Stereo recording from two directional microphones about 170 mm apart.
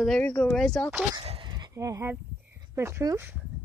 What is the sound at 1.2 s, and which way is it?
Horse, 30° right (ahead or behind).